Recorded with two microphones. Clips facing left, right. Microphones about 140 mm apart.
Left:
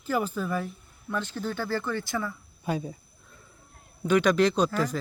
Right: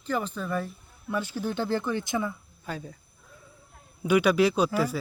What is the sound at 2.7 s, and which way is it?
Speech, 15° left (ahead or behind).